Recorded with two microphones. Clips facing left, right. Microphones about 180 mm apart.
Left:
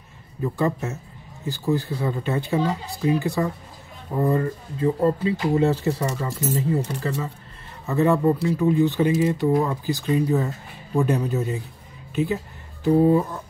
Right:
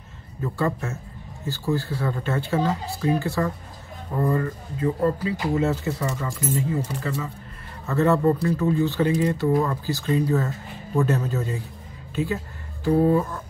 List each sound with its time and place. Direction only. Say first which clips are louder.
0.4 s speech: left 2 dB; 15° left (ahead or behind); by 7.2 s 35° left (ahead or behind)
7.8 s speech: left 1 dB; 15° left (ahead or behind)